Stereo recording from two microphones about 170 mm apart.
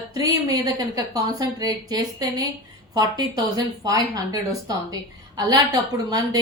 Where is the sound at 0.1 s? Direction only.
20° right (ahead or behind).